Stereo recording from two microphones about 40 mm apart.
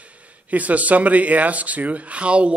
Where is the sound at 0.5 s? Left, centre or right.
Right.